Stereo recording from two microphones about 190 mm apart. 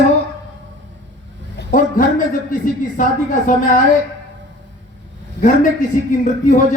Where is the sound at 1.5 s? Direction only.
45° left (ahead or behind).